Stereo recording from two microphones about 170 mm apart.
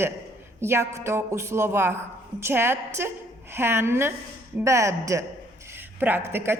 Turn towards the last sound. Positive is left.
turn(degrees=-15)  # may be behind; listen again after turning